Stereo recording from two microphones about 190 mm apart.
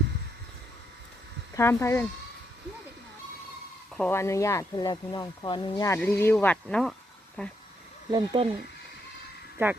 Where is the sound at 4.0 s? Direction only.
10° left (ahead or behind).